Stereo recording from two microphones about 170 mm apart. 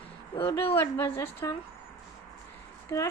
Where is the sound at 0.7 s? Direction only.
15° left (ahead or behind).